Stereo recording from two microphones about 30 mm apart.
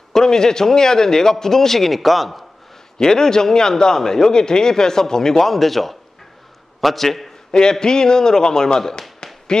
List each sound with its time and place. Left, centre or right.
0.1 s a man's voice: centre
3.0 s a man's voice: left
7.8 s a man's voice: left
9.2 s firecracker: left